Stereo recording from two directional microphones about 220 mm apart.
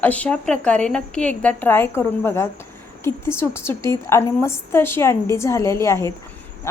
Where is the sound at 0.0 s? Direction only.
5° left (ahead or behind).